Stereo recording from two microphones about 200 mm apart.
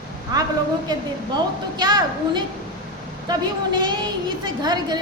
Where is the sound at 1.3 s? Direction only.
20° right (ahead or behind).